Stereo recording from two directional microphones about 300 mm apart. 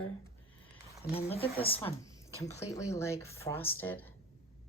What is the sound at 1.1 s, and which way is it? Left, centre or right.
A woman's voice, centre.